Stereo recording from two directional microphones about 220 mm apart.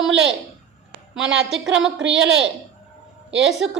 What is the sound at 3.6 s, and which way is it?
Speech, 60° right (ahead or behind).